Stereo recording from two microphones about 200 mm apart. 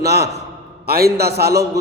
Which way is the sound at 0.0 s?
55° right (ahead or behind).